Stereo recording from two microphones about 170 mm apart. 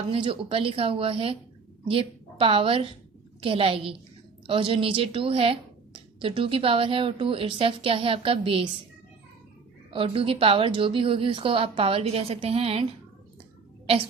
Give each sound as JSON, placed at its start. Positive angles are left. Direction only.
{"t": 0.1, "sound": "a woman's voice", "side_deg": -30}
{"t": 9.9, "sound": "a woman's voice", "side_deg": -30}